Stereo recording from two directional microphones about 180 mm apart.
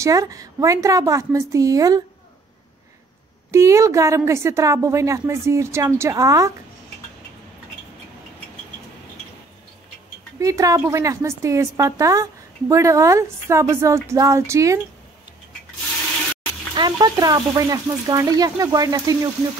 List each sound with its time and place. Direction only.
0.0 s speech: 20° right (ahead or behind)
3.5 s a woman's voice: 15° right (ahead or behind)
10.4 s a woman's voice: 20° right (ahead or behind)
16.7 s speech: 25° right (ahead or behind)